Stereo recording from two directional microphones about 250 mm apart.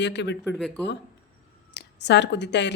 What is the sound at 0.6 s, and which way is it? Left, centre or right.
Speech, centre.